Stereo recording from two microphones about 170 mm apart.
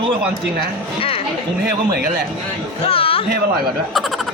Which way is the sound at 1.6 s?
70° right (ahead or behind).